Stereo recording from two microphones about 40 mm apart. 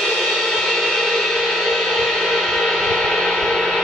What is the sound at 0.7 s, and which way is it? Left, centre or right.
Music, centre.